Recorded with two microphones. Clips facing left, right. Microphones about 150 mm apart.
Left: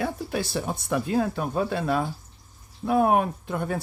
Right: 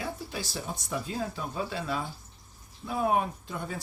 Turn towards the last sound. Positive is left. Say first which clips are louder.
# left 8 dB
turn(degrees=60)  # may be behind; listen again after turning